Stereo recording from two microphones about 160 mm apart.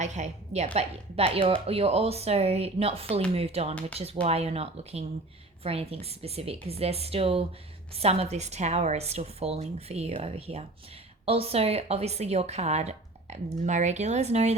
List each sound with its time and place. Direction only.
0.0 s a woman's voice: 45° right (ahead or behind)